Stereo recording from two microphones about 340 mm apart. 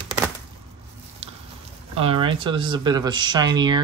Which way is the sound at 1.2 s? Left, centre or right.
Centre.